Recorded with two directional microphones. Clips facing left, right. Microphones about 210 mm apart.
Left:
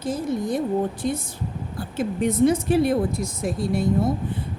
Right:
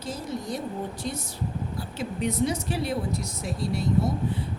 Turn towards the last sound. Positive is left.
turn(degrees=50)  # may be behind; listen again after turning